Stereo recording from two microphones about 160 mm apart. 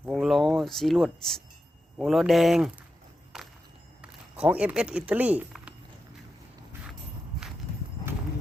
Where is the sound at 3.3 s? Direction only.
Centre (ahead or behind).